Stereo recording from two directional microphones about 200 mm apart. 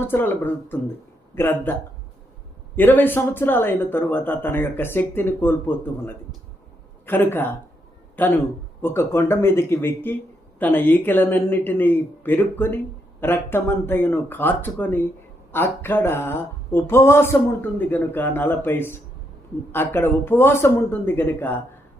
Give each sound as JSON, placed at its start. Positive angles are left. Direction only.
{"t": 0.0, "sound": "speech", "side_deg": 10}
{"t": 2.7, "sound": "speech", "side_deg": 10}